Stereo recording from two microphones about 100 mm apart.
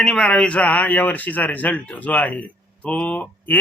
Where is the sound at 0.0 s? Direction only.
10° left (ahead or behind).